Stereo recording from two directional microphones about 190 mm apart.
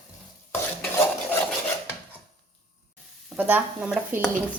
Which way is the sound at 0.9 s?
10° left (ahead or behind).